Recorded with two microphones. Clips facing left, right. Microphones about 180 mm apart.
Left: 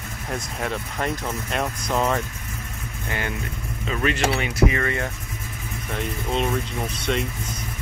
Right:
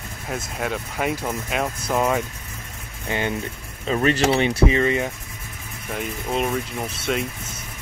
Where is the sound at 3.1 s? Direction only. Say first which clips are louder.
Right 4 dB; 20° right (ahead or behind).